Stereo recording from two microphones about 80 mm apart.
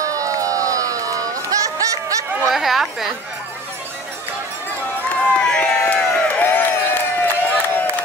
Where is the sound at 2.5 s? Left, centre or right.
Centre.